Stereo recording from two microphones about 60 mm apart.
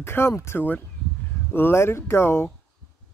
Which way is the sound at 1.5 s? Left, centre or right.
Left.